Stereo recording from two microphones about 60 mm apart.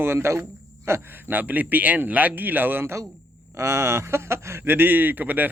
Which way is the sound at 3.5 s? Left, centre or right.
Right.